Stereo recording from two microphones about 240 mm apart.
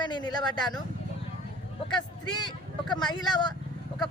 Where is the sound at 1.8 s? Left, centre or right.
Centre.